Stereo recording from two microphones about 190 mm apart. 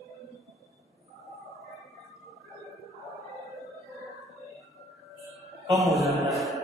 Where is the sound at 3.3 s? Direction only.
Centre (ahead or behind).